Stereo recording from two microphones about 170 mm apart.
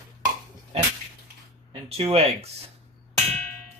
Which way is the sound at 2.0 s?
35° right (ahead or behind).